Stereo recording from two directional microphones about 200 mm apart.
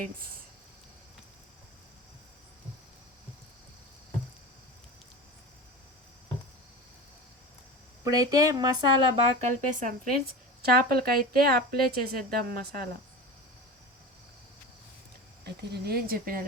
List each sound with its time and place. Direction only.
8.0 s speech: 15° right (ahead or behind)
9.4 s speech: 40° right (ahead or behind)
15.4 s speech: 55° right (ahead or behind)